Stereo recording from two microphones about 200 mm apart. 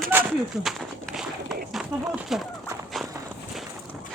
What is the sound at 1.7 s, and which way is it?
Speech, centre (ahead or behind).